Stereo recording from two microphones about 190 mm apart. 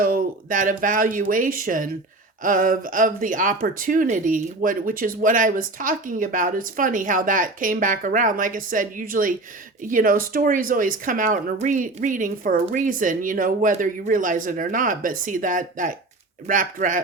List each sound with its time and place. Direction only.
0.0 s speech: 45° right (ahead or behind)